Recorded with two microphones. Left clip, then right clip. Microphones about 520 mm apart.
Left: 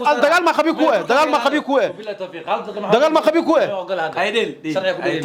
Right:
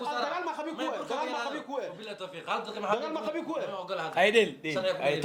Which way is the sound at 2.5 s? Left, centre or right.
Left.